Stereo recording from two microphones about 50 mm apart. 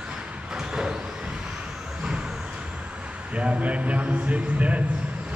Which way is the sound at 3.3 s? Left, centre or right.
Right.